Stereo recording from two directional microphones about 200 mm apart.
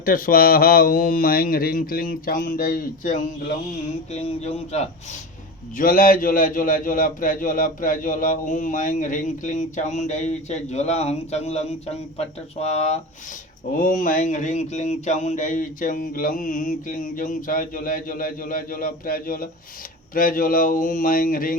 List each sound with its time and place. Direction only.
0.0 s a man's voice: 45° left (ahead or behind)
5.7 s a man's voice: 45° left (ahead or behind)